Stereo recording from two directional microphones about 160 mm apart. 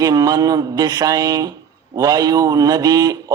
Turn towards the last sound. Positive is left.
turn(degrees=-25)  # may be behind; listen again after turning